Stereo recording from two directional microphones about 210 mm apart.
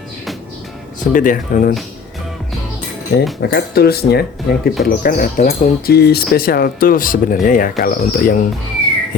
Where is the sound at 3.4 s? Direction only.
50° left (ahead or behind).